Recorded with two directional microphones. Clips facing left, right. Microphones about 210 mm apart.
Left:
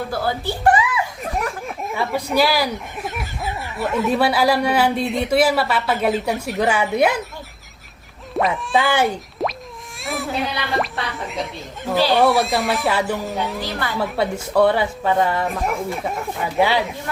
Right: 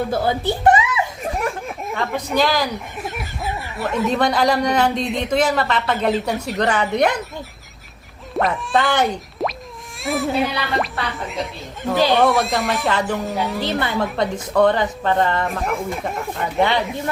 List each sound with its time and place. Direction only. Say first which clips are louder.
0.1 s a child's voice: right 3 dB; 20° right (ahead or behind)
1.9 s a woman's voice: left 1 dB; 10° left (ahead or behind)
8.4 s speech: even; centre (ahead or behind)
10.0 s a sound: right 5 dB; centre (ahead or behind)
10.8 s a woman's voice: even; centre (ahead or behind)
13.7 s a woman's voice: right 4 dB; 25° right (ahead or behind)
14.0 s speech: even; 5° left (ahead or behind)